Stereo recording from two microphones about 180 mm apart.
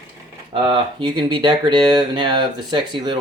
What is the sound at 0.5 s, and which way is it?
Speech, 25° right (ahead or behind).